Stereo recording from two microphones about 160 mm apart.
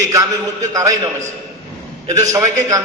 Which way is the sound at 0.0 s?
20° right (ahead or behind).